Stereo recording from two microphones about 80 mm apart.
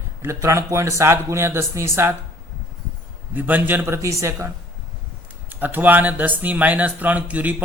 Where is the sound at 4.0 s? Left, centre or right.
Right.